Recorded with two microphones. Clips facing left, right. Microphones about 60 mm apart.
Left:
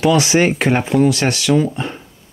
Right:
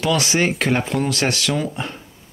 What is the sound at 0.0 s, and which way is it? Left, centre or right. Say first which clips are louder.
Speech: left 5 dB; centre.